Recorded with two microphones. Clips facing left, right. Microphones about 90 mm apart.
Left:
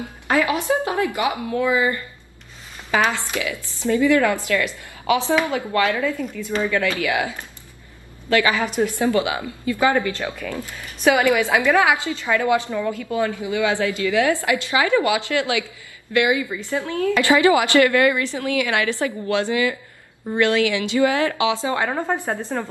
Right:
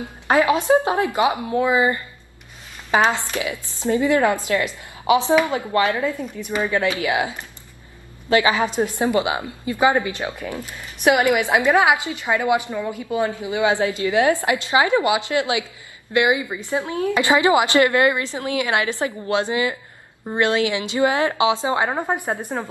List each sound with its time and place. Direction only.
0.0 s a woman's voice: 20° right (ahead or behind)